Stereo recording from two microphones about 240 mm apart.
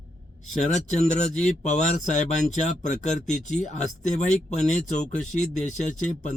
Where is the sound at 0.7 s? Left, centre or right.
Left.